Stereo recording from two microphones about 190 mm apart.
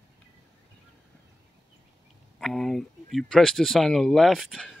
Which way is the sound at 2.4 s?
Centre (ahead or behind).